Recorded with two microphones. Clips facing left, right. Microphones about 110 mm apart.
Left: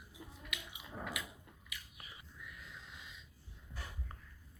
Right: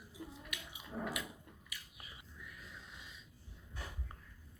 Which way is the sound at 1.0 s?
5° right (ahead or behind).